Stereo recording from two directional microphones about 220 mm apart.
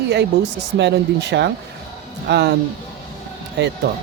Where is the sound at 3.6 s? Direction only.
50° right (ahead or behind).